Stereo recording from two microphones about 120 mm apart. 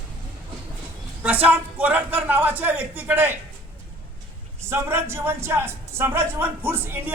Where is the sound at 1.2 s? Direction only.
15° right (ahead or behind).